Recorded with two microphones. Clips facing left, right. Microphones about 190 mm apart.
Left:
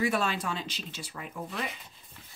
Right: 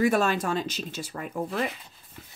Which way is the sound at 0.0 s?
45° right (ahead or behind).